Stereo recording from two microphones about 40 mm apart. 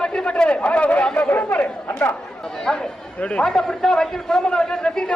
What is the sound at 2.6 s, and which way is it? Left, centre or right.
Speech, centre.